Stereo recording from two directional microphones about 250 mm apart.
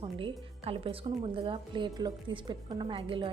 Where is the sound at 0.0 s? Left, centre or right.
Centre.